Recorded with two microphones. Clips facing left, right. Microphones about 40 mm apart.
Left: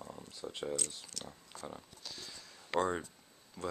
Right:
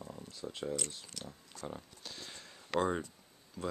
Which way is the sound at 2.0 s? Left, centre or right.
Right.